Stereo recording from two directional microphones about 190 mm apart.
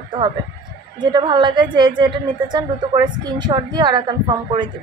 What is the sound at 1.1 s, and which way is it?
A woman's voice, 25° right (ahead or behind).